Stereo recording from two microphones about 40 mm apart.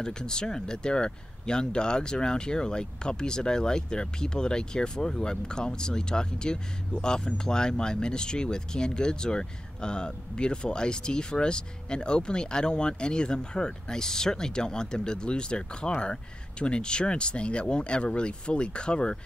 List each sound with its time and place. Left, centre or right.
0.0 s speech: centre